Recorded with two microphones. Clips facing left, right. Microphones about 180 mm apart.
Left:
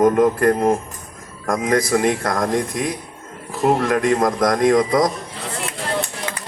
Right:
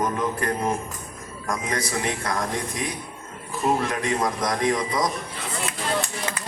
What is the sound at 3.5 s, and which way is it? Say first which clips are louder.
A man's voice: left 6 dB; 70° left (ahead or behind).